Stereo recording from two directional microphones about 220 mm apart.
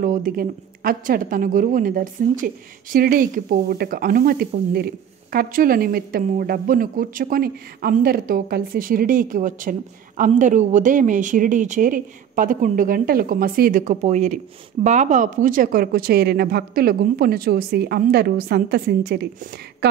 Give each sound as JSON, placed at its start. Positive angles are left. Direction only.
{"t": 0.0, "sound": "a woman's voice", "side_deg": -40}